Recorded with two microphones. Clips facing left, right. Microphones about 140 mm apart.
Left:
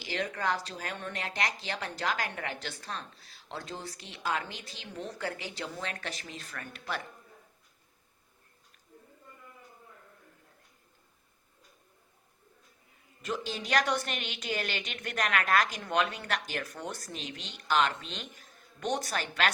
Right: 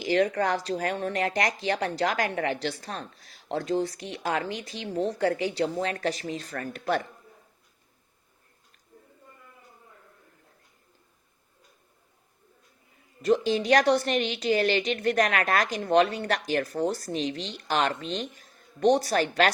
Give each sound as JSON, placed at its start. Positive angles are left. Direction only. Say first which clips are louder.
{"t": 0.1, "sound": "speech", "louder": "right 8 dB", "side_deg": -40}
{"t": 13.2, "sound": "speech", "louder": "right 12 dB", "side_deg": -40}